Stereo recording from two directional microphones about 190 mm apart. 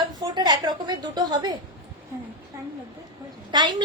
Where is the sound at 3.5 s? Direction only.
20° right (ahead or behind).